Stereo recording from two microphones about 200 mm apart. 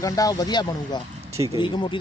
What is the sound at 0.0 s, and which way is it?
Speech, 15° left (ahead or behind).